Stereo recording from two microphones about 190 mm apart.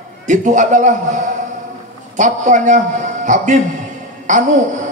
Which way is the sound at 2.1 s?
40° right (ahead or behind).